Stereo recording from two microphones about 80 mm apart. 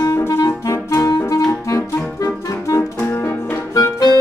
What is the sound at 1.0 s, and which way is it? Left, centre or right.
Clarinet, left.